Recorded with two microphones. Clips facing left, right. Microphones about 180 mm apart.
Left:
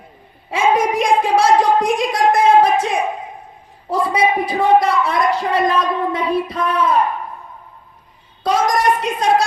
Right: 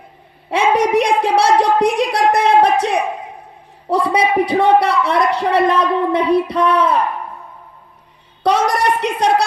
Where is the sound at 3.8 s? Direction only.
65° right (ahead or behind).